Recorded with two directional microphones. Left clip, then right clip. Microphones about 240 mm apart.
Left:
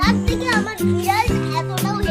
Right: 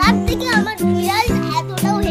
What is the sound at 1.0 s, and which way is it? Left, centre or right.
Music, centre.